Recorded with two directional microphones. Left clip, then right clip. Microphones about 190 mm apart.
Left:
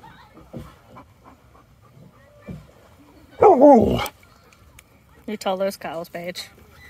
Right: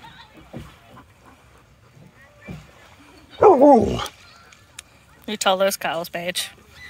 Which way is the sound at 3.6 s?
30° left (ahead or behind).